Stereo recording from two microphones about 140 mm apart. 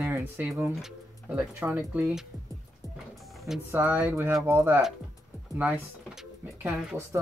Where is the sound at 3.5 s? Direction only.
10° right (ahead or behind).